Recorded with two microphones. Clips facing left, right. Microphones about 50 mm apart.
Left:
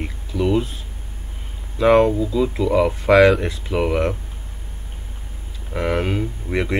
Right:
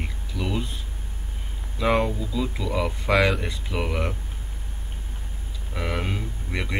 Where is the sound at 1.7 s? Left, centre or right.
Centre.